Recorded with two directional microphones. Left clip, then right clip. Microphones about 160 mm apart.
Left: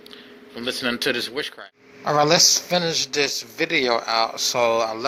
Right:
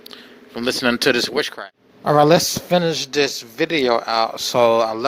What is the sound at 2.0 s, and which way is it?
Speech, 40° right (ahead or behind).